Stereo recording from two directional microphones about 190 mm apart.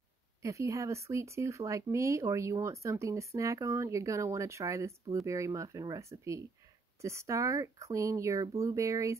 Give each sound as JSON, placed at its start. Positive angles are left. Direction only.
{"t": 0.4, "sound": "speech", "side_deg": -15}